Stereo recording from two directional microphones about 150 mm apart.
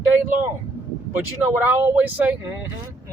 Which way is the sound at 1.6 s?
15° right (ahead or behind).